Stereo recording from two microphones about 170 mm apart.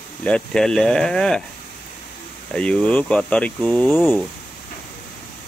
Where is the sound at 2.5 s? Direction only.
5° left (ahead or behind).